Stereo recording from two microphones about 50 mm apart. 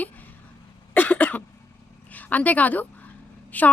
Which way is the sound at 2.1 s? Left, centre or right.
Left.